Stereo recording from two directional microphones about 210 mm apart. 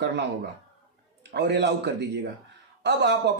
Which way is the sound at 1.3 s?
55° right (ahead or behind).